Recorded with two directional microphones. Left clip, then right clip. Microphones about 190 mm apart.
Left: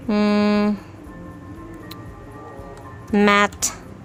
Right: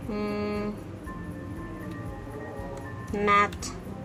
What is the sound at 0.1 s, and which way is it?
Music, 55° left (ahead or behind).